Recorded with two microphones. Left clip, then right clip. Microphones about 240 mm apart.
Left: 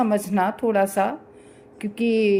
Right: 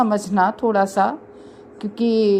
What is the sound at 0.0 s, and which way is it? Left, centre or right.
A woman's voice, right.